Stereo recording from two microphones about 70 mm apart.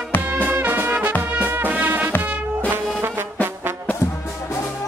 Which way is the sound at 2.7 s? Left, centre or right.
Right.